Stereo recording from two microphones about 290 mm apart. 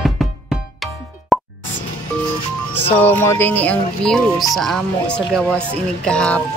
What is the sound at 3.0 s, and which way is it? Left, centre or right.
Speech, centre.